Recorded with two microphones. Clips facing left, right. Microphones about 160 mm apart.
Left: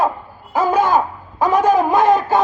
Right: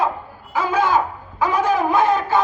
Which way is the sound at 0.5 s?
45° left (ahead or behind).